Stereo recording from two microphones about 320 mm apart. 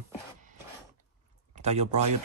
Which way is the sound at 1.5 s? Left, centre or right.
Centre.